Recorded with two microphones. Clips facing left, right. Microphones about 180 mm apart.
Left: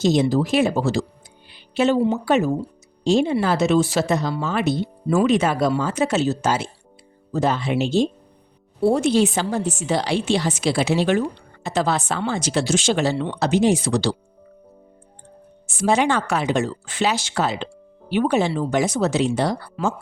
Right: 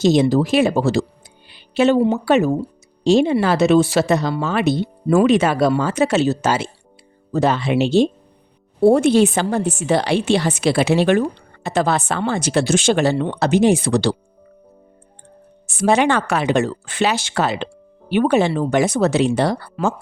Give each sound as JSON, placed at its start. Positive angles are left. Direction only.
{"t": 0.0, "sound": "a woman's voice", "side_deg": -75}
{"t": 8.8, "sound": "a woman's voice", "side_deg": -55}
{"t": 15.6, "sound": "a woman's voice", "side_deg": -65}